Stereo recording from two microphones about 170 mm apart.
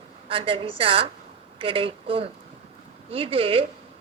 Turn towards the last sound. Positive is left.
turn(degrees=-35)  # may be behind; listen again after turning